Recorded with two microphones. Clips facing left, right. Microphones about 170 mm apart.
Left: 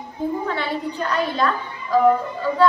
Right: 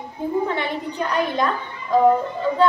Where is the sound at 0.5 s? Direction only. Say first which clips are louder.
Even; 20° right (ahead or behind).